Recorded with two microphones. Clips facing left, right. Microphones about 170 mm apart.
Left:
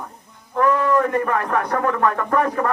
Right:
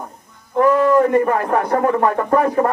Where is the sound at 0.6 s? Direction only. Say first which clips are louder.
Right 5 dB; 30° right (ahead or behind).